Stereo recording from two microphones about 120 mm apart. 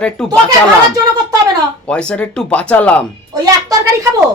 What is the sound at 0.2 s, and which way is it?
Speech, 5° left (ahead or behind).